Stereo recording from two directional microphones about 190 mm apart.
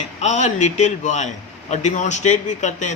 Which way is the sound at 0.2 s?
35° left (ahead or behind).